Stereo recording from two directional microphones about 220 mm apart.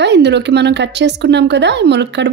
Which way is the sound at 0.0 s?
50° right (ahead or behind).